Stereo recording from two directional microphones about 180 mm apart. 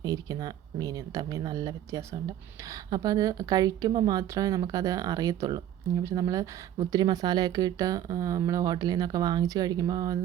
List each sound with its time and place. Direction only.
0.0 s speech: 20° right (ahead or behind)